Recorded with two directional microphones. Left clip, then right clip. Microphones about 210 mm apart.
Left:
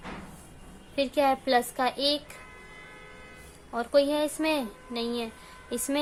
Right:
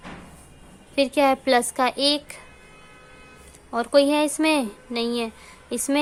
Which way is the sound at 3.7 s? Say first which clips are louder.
Right 6 dB; 30° right (ahead or behind).